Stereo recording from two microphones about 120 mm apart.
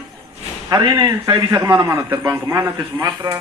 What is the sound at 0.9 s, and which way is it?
A man's voice, 35° right (ahead or behind).